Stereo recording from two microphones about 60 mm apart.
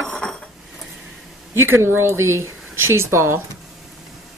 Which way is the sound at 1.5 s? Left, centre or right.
Right.